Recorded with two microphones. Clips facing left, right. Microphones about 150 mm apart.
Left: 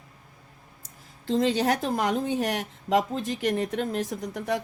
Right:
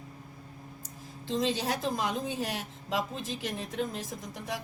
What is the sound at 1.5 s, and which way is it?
A woman's voice, 70° left (ahead or behind).